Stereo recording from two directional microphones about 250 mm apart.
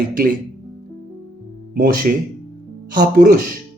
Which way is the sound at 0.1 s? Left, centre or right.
Right.